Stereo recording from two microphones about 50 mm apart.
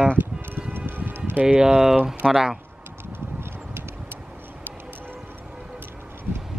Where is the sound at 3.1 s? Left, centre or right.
Right.